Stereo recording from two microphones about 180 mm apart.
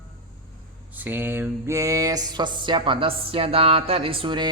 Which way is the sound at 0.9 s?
10° right (ahead or behind).